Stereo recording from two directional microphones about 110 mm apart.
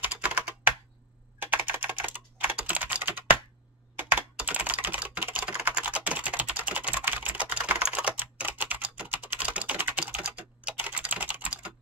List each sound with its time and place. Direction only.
0.0 s computer keyboard: 15° right (ahead or behind)
1.4 s typing: 15° right (ahead or behind)